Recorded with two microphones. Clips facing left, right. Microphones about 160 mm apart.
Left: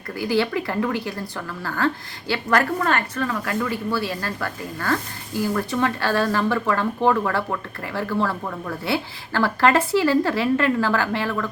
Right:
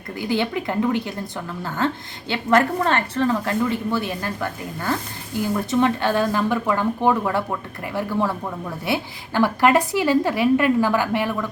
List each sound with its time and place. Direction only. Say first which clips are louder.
0.2 s a woman's voice: left 1 dB; 20° right (ahead or behind)